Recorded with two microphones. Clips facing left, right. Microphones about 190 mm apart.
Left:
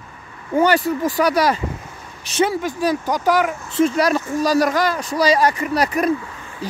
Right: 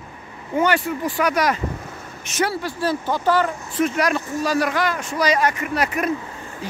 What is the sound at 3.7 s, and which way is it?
Speech, 30° left (ahead or behind).